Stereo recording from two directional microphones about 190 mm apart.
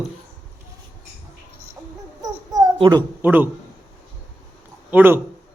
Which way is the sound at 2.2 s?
20° right (ahead or behind).